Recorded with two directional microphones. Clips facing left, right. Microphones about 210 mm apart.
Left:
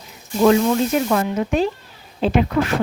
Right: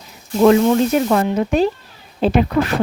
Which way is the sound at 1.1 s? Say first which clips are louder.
Right 3 dB; 35° right (ahead or behind).